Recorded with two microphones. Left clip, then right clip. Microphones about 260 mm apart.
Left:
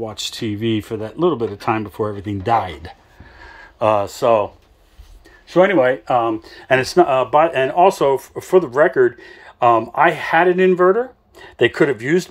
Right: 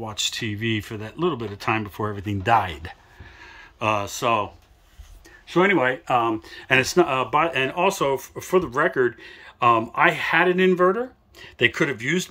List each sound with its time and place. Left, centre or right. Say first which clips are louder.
0.0 s speech: left 2 dB; centre
5.6 s speech: left 6 dB; centre